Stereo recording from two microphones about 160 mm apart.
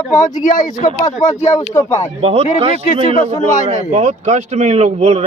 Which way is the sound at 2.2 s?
40° right (ahead or behind).